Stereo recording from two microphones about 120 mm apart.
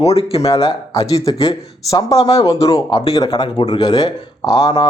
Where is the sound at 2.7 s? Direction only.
40° left (ahead or behind).